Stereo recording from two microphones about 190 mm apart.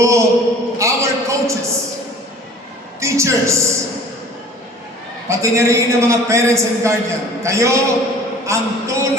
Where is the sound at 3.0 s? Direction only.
15° right (ahead or behind).